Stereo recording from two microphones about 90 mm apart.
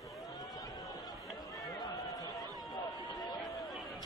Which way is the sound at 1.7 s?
40° left (ahead or behind).